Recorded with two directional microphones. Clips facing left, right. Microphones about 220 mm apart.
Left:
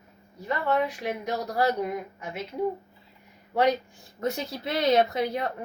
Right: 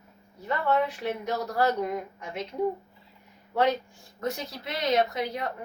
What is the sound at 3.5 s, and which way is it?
Speech, 15° left (ahead or behind).